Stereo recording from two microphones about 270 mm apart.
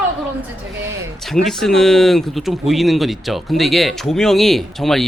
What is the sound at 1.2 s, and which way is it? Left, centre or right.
Speech, centre.